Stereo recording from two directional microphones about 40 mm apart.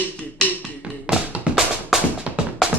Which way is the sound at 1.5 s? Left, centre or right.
Right.